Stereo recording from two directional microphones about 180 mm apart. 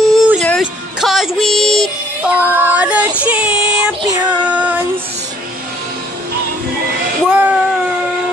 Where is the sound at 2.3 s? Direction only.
10° right (ahead or behind).